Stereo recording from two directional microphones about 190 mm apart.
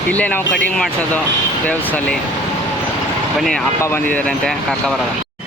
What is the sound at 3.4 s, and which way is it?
Speech, centre (ahead or behind).